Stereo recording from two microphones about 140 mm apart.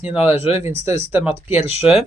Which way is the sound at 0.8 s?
15° right (ahead or behind).